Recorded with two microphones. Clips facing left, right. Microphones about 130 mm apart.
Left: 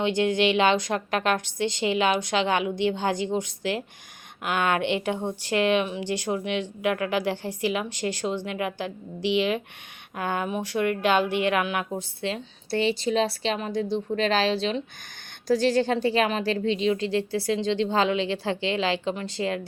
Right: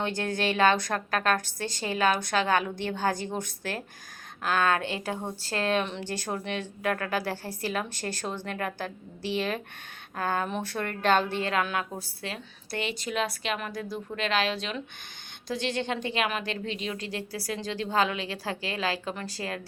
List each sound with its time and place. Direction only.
0.5 s a woman's voice: 20° left (ahead or behind)